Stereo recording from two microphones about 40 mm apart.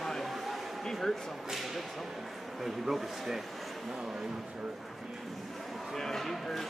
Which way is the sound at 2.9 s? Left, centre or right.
Centre.